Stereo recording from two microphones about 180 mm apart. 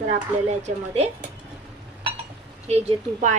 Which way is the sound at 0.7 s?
35° right (ahead or behind).